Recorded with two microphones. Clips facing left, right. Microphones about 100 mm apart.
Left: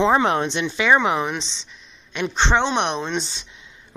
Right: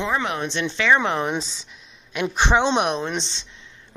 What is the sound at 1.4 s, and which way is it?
A man's voice, 5° right (ahead or behind).